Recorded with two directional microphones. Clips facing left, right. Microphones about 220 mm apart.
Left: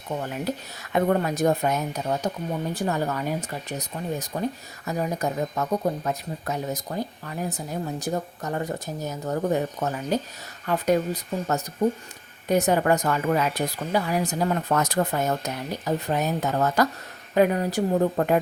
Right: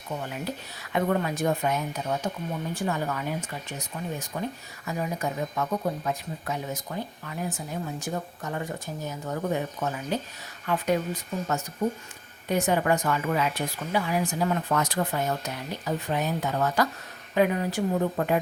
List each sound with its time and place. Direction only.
0.8 s speech: 45° left (ahead or behind)